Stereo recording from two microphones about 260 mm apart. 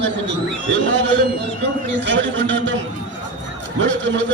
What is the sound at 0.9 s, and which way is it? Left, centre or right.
A man's voice, right.